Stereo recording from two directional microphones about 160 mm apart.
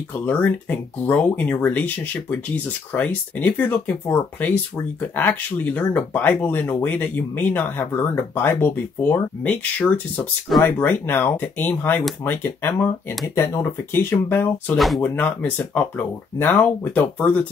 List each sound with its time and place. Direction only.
0.1 s speech: 10° left (ahead or behind)
14.8 s speech: centre (ahead or behind)
15.1 s speech: 10° left (ahead or behind)